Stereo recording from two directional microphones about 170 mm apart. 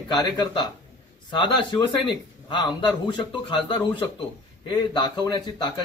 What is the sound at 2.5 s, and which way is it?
A man's voice, 25° left (ahead or behind).